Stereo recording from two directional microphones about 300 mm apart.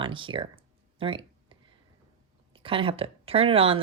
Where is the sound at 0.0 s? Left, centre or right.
Centre.